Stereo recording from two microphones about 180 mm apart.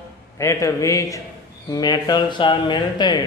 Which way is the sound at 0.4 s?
15° left (ahead or behind).